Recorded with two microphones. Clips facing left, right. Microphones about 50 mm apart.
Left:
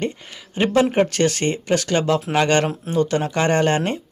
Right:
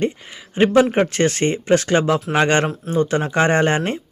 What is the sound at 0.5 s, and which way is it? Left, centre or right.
Speech, right.